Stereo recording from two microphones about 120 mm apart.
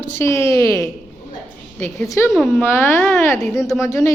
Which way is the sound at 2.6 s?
20° left (ahead or behind).